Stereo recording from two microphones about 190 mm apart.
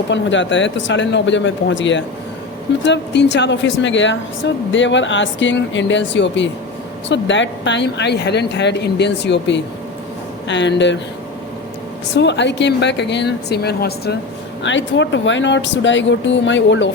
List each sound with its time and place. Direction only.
0.1 s speech: 75° left (ahead or behind)
12.1 s speech: 65° left (ahead or behind)
14.6 s speech: 70° left (ahead or behind)